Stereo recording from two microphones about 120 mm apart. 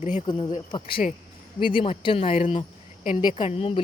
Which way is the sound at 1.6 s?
45° left (ahead or behind).